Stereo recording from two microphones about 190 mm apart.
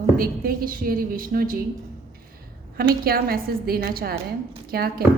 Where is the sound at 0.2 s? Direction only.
50° right (ahead or behind).